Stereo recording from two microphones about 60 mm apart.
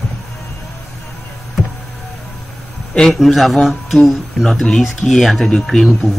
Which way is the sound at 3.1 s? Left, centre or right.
Centre.